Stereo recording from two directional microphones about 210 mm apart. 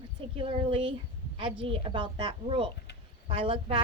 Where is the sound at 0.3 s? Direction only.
25° right (ahead or behind).